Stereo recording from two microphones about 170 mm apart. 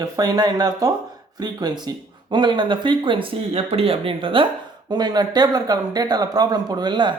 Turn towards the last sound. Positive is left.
turn(degrees=-25)  # may be behind; listen again after turning